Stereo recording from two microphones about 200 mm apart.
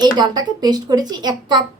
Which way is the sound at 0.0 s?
20° right (ahead or behind).